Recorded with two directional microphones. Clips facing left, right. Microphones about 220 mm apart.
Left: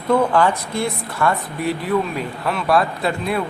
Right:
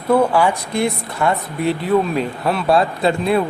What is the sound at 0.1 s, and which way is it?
Speech, 10° right (ahead or behind).